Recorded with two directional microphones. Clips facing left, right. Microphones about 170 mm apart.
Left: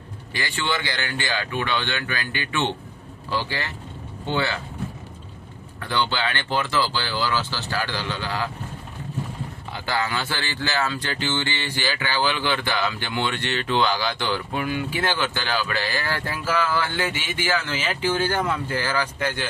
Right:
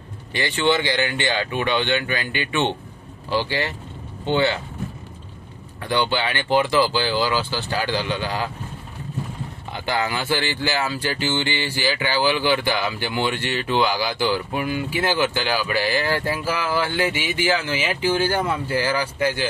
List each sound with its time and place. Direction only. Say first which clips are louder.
0.3 s speech: right 7 dB; 20° right (ahead or behind)
5.8 s speech: right 3 dB; 15° right (ahead or behind)
9.7 s speech: right 2 dB; 20° right (ahead or behind)